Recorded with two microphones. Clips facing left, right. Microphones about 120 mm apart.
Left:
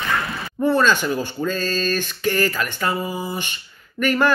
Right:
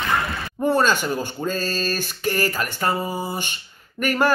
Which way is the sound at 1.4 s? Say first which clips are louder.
Left 2 dB; 40° right (ahead or behind).